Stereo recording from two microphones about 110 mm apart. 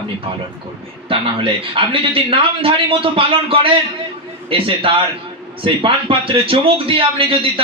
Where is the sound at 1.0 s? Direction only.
55° right (ahead or behind).